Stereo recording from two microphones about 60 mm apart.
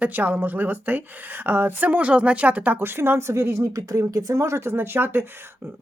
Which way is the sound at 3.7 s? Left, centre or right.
Right.